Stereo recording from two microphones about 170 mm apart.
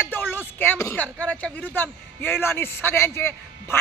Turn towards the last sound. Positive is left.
turn(degrees=15)  # may be behind; listen again after turning